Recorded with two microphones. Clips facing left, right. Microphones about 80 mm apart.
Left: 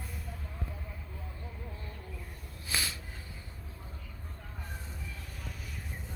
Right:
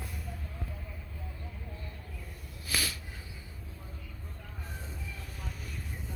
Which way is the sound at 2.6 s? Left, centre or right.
Left.